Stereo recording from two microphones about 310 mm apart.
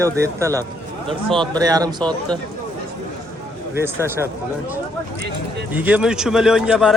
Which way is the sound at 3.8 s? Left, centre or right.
Centre.